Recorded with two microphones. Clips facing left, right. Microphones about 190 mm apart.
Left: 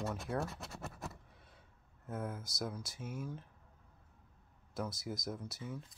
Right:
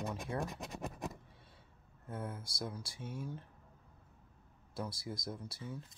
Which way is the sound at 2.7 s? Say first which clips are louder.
Left 1 dB; 30° right (ahead or behind).